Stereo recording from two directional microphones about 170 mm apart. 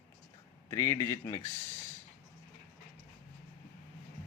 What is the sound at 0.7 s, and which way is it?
Speech, 15° left (ahead or behind).